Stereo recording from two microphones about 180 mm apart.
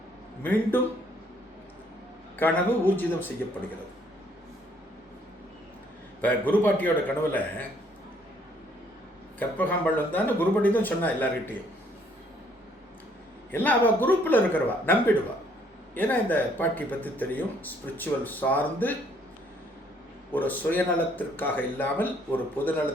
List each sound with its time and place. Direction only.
2.4 s speech: 10° left (ahead or behind)
6.2 s speech: 10° left (ahead or behind)
9.4 s speech: 10° left (ahead or behind)
13.5 s speech: 10° left (ahead or behind)
20.3 s speech: 10° left (ahead or behind)